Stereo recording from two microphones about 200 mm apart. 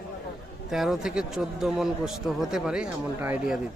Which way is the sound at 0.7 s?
Centre (ahead or behind).